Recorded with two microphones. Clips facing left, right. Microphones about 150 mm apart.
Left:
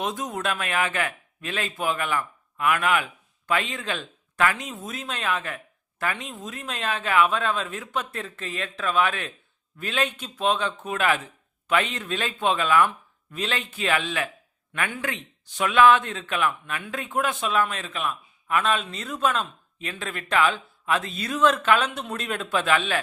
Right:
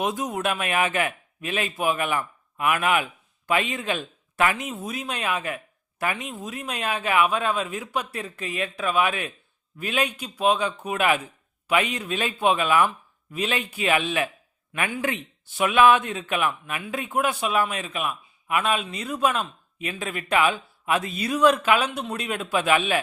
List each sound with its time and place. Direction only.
0.2 s a man's voice: 20° right (ahead or behind)
15.5 s a man's voice: 15° right (ahead or behind)